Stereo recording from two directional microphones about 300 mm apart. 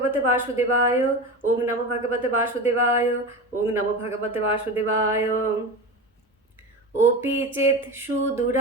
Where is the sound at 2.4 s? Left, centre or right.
Centre.